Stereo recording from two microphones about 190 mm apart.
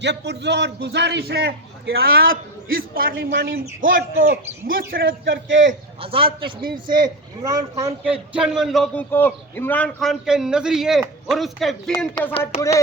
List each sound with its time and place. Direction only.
0.0 s a man's voice: 65° right (ahead or behind)
5.2 s a man's voice: 70° right (ahead or behind)
6.0 s speech: 30° right (ahead or behind)
6.6 s a man's voice: 50° right (ahead or behind)
6.9 s speech: 20° right (ahead or behind)
8.3 s a man's voice: 5° right (ahead or behind)
11.9 s speech: 15° left (ahead or behind)